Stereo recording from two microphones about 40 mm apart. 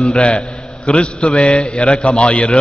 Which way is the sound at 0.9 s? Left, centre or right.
Left.